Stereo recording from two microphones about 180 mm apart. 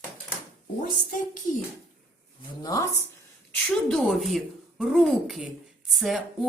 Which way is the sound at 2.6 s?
20° left (ahead or behind).